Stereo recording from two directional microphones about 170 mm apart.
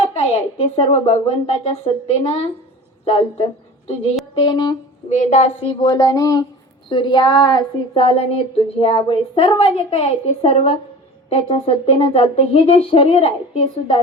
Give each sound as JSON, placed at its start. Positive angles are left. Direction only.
{"t": 0.0, "sound": "speech", "side_deg": 35}
{"t": 3.0, "sound": "a woman's voice", "side_deg": 35}
{"t": 4.4, "sound": "a sound", "side_deg": 25}
{"t": 5.0, "sound": "a woman's voice", "side_deg": 45}
{"t": 5.8, "sound": "a sound", "side_deg": 20}
{"t": 6.9, "sound": "speech", "side_deg": 30}